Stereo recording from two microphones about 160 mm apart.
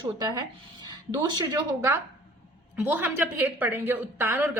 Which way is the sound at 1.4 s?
20° right (ahead or behind).